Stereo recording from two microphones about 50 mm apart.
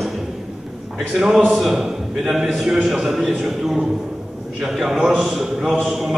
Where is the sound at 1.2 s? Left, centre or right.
Centre.